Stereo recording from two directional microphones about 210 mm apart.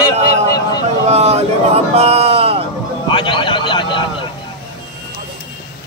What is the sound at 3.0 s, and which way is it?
A man's voice, 25° left (ahead or behind).